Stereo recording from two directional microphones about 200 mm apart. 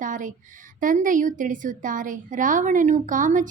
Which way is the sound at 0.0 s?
40° right (ahead or behind).